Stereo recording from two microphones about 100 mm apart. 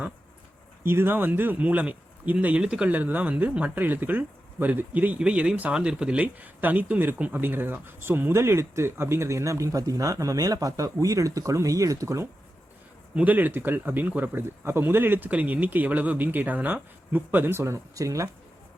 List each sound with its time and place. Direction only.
0.9 s speech: 20° right (ahead or behind)
13.1 s speech: 15° right (ahead or behind); by 18.3 s 35° right (ahead or behind)